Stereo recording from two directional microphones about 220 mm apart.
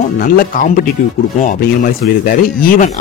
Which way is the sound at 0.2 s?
40° left (ahead or behind).